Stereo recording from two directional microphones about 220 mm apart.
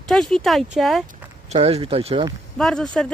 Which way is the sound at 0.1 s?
Centre (ahead or behind).